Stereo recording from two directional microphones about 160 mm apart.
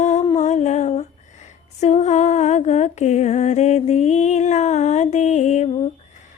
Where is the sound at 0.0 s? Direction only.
45° left (ahead or behind).